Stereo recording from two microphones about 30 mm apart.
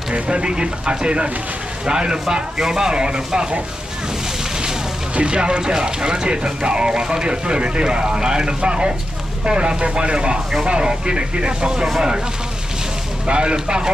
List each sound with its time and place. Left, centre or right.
0.1 s a man's voice: right
5.1 s a man's voice: right
6.2 s speech: right
13.3 s speech: right